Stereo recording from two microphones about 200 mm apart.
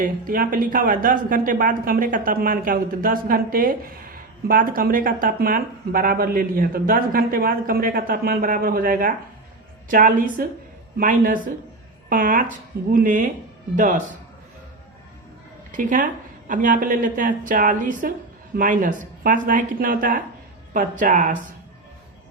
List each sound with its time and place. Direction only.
0.0 s a woman's voice: 45° right (ahead or behind)
15.7 s a woman's voice: 40° right (ahead or behind)